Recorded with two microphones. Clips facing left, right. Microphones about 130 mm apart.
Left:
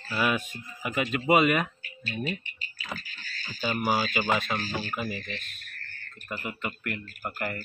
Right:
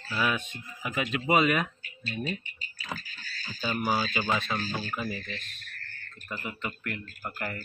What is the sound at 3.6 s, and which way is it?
Speech, 10° left (ahead or behind).